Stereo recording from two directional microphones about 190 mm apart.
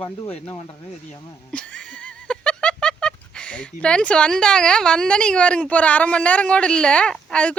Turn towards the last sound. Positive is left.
turn(degrees=5)  # may be behind; listen again after turning